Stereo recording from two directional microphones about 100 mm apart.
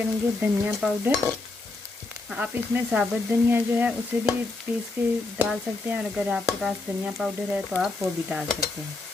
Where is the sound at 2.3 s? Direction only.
15° right (ahead or behind).